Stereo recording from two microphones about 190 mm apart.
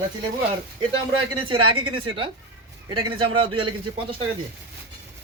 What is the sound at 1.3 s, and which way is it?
Speech, 30° right (ahead or behind).